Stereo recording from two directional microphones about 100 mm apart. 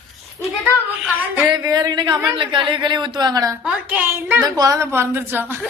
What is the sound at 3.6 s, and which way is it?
Speech, 15° right (ahead or behind).